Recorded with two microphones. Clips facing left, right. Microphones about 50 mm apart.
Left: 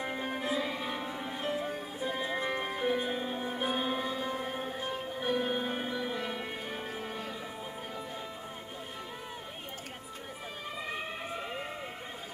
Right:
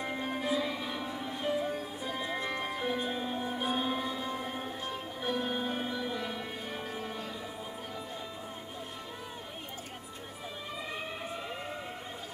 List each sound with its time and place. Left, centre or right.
0.1 s music: centre
10.9 s siren: centre